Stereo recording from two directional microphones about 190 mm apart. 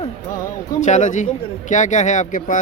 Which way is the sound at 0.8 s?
40° left (ahead or behind).